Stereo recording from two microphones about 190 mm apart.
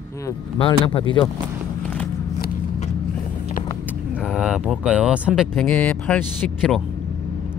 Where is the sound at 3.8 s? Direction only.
5° right (ahead or behind).